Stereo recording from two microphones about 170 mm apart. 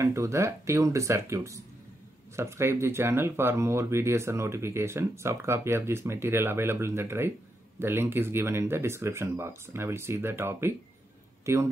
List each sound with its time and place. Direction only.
0.0 s speech: 15° right (ahead or behind)